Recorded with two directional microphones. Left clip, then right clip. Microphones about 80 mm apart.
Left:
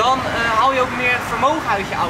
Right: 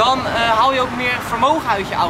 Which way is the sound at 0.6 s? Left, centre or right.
Centre.